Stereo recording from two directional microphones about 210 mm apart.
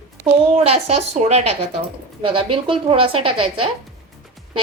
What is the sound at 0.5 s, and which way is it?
Speech, 30° right (ahead or behind).